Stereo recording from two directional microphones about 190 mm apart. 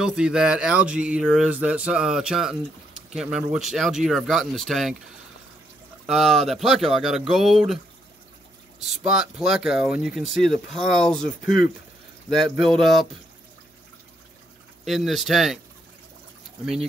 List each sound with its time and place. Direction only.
0.0 s speech: 5° right (ahead or behind)
6.0 s speech: centre (ahead or behind)
8.8 s speech: 5° right (ahead or behind)
14.9 s speech: centre (ahead or behind)